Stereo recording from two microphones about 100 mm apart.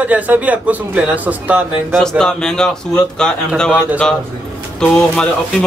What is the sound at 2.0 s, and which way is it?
Speech, 5° left (ahead or behind).